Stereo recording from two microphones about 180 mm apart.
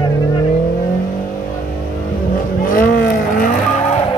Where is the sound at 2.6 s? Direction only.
50° left (ahead or behind).